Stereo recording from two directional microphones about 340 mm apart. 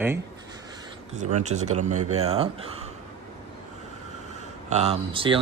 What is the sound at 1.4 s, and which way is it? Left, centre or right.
Speech, right.